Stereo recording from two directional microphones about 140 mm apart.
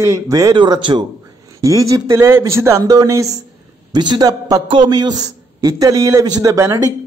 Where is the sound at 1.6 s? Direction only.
25° right (ahead or behind).